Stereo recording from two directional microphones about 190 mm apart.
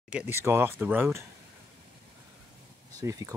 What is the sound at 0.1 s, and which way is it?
Speech, 10° right (ahead or behind).